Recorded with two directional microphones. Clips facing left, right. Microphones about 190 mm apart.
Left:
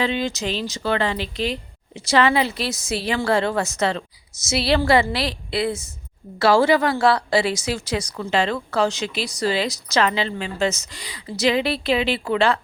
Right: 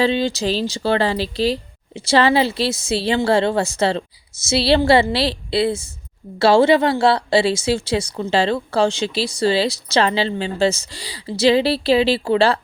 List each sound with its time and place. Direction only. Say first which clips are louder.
0.0 s a woman's voice: right 5 dB; 30° right (ahead or behind)